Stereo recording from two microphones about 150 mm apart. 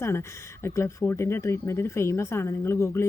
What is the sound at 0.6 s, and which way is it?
A woman's voice, 20° left (ahead or behind).